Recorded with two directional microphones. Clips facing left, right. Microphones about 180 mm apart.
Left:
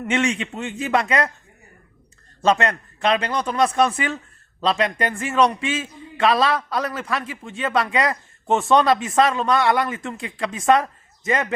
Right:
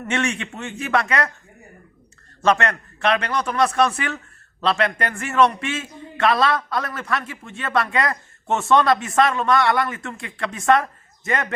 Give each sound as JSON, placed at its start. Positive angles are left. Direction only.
{"t": 0.1, "sound": "a man's voice", "side_deg": 20}
{"t": 2.5, "sound": "a man's voice", "side_deg": 25}